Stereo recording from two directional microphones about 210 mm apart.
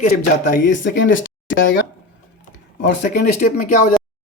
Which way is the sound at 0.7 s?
60° left (ahead or behind).